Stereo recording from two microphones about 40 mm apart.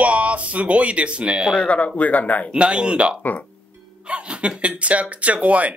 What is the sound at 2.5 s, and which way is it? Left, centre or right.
Speech, right.